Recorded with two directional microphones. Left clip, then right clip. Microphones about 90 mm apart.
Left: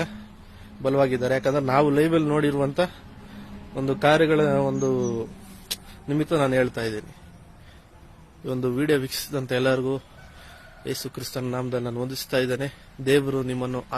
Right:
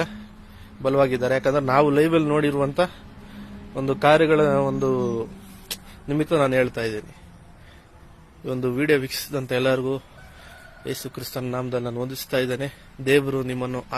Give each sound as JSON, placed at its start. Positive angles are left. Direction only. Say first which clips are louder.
{"t": 0.8, "sound": "a man's voice", "louder": "right 2 dB", "side_deg": 25}
{"t": 2.4, "sound": "a man's voice", "louder": "right 1 dB", "side_deg": 35}
{"t": 3.8, "sound": "a man's voice", "louder": "right 2 dB", "side_deg": 30}
{"t": 8.4, "sound": "a man's voice", "louder": "right 2 dB", "side_deg": 30}
{"t": 11.7, "sound": "a man's voice", "louder": "right 2 dB", "side_deg": 25}
{"t": 11.9, "sound": "a man's voice", "louder": "left 1 dB", "side_deg": 45}